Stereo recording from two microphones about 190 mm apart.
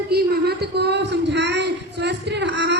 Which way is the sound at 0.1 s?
60° right (ahead or behind).